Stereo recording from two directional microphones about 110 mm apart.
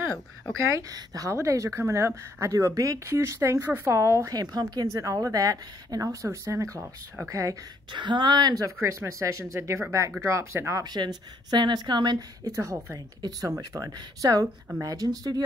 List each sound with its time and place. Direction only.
0.7 s speech: 35° right (ahead or behind)
7.9 s speech: 45° right (ahead or behind); by 10.9 s 25° right (ahead or behind)
10.9 s a woman's voice: 40° right (ahead or behind)